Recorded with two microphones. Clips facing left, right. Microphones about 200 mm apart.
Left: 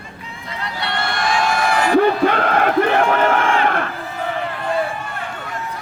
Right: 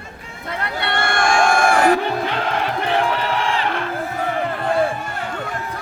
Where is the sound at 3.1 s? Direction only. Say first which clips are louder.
Left 5 dB; 50° left (ahead or behind).